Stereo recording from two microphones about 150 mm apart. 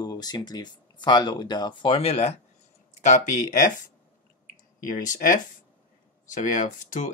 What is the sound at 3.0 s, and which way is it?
Speech, 50° left (ahead or behind).